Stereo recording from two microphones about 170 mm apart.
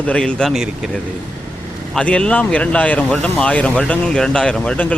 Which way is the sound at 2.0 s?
5° left (ahead or behind).